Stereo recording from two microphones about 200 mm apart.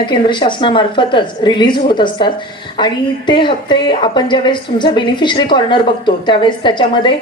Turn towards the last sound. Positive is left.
turn(degrees=25)  # may be behind; listen again after turning